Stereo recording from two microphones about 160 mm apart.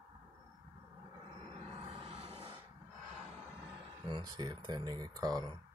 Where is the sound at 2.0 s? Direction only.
40° right (ahead or behind).